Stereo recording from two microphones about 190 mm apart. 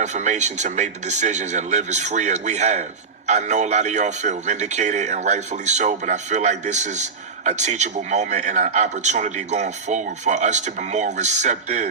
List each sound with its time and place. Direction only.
0.0 s speech: 40° right (ahead or behind)